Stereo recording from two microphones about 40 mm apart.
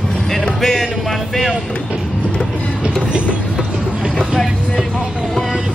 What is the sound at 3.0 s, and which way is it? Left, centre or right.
Train, right.